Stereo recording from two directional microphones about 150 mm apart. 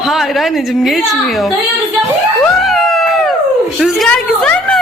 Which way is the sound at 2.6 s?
Centre (ahead or behind).